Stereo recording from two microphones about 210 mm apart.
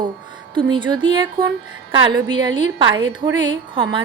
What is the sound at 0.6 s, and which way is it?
Speech, 20° right (ahead or behind).